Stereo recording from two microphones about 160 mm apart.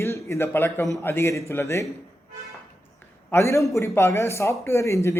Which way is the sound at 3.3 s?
20° left (ahead or behind).